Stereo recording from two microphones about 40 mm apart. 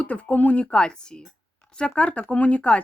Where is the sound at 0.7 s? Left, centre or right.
Left.